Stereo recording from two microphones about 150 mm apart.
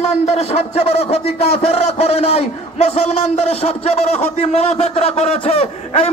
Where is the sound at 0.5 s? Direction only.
45° left (ahead or behind).